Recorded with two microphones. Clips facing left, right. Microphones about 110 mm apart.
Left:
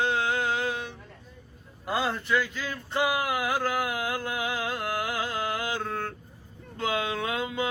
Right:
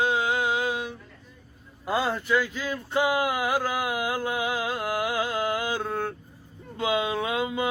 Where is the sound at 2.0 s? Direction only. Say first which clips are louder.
Right 1 dB; 10° right (ahead or behind).